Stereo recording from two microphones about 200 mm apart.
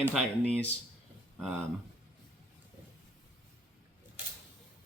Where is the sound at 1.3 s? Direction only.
Centre (ahead or behind).